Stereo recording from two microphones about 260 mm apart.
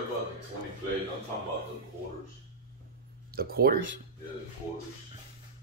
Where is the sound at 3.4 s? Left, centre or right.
Right.